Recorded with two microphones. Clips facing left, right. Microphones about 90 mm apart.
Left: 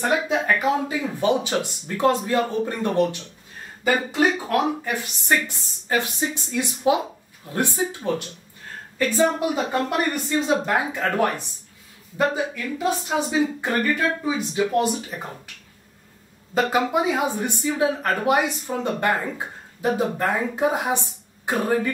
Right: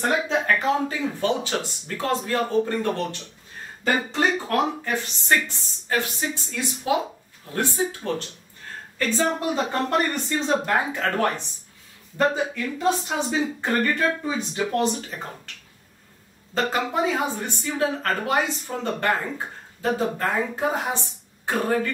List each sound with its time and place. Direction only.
0.1 s speech: 10° left (ahead or behind)
6.5 s speech: 20° left (ahead or behind)
16.9 s speech: 15° left (ahead or behind)